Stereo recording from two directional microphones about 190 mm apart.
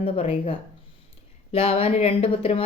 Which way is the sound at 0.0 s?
30° left (ahead or behind).